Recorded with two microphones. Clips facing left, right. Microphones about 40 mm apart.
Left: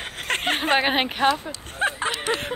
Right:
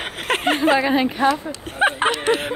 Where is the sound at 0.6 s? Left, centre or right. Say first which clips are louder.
Right 3 dB; left.